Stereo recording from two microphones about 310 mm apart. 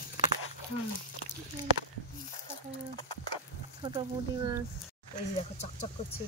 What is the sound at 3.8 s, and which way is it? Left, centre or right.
Speech, centre.